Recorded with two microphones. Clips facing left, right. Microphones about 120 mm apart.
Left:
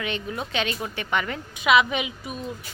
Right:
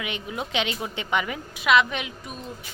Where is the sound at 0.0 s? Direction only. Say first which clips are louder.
Left 2 dB; 15° right (ahead or behind).